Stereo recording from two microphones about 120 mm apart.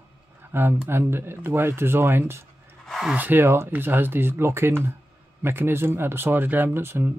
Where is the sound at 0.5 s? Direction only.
20° right (ahead or behind).